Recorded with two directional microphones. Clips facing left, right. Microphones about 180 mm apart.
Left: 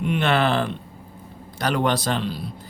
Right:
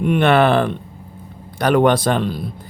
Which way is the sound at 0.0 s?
55° right (ahead or behind).